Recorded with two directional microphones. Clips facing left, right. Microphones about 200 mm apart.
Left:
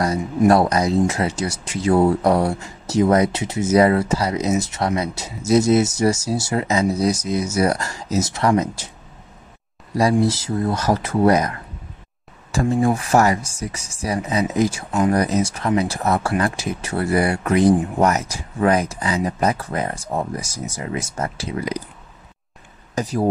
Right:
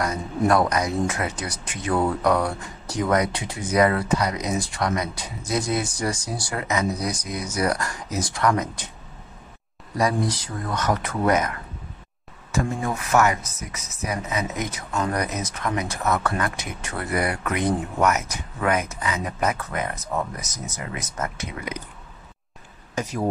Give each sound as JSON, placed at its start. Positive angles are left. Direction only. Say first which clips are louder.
{"t": 0.5, "sound": "speech", "louder": "left 4 dB", "side_deg": 30}
{"t": 9.9, "sound": "speech", "louder": "left 6 dB", "side_deg": 30}
{"t": 12.5, "sound": "speech", "louder": "left 7 dB", "side_deg": 30}
{"t": 23.0, "sound": "speech", "louder": "left 4 dB", "side_deg": 35}